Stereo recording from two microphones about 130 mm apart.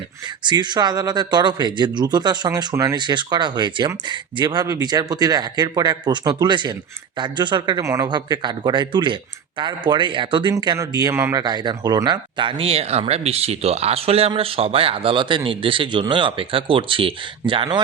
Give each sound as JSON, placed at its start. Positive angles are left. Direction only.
{"t": 0.4, "sound": "speech", "side_deg": -35}
{"t": 7.8, "sound": "speech", "side_deg": -25}
{"t": 11.4, "sound": "speech", "side_deg": -35}